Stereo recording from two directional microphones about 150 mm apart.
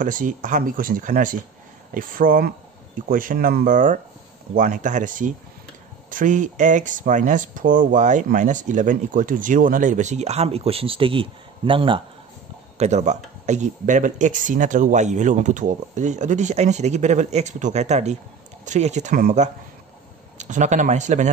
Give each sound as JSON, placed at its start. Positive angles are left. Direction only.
{"t": 0.0, "sound": "speech", "side_deg": -60}
{"t": 12.7, "sound": "speech", "side_deg": -50}
{"t": 19.1, "sound": "speech", "side_deg": -60}